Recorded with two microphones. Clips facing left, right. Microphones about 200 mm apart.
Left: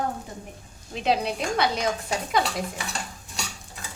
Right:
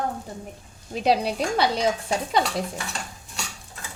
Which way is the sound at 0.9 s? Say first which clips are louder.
Right 3 dB; 40° right (ahead or behind).